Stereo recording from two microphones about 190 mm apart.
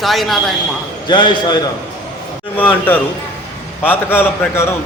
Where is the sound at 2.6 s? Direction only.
10° left (ahead or behind).